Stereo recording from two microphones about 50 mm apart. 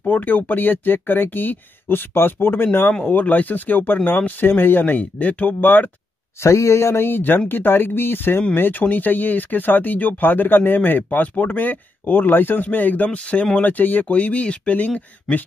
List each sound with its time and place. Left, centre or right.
0.0 s speech: left
3.1 s speech: left
6.4 s speech: left
7.1 s speech: left